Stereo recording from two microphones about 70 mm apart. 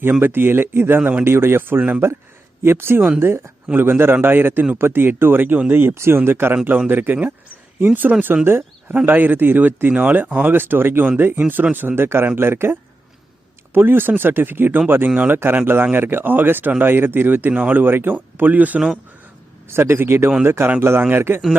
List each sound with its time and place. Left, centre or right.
0.1 s speech: right
13.7 s speech: right
19.7 s speech: right